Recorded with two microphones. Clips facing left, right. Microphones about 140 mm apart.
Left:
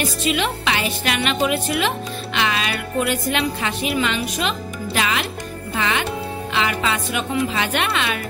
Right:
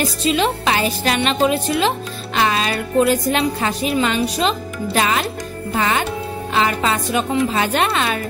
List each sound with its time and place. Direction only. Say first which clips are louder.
0.2 s a woman's voice: right 6 dB; 35° right (ahead or behind)